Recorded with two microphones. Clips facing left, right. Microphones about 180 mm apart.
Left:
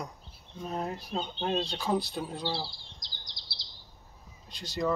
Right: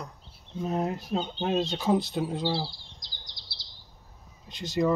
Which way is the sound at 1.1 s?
10° right (ahead or behind).